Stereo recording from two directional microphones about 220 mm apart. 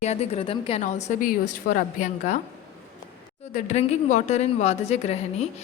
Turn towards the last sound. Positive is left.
turn(degrees=30)  # may be behind; listen again after turning